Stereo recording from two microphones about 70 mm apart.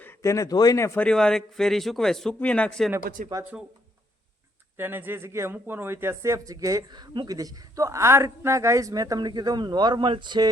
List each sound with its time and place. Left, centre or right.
0.2 s speech: left
0.5 s speech: left
1.1 s a man's voice: centre
2.4 s a man's voice: centre
3.3 s speech: right
4.8 s a man's voice: right
6.9 s a woman's voice: right